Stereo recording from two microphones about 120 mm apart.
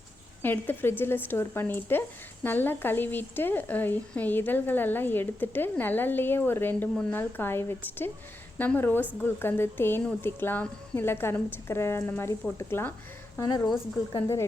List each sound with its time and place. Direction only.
0.4 s a woman's voice: 15° left (ahead or behind)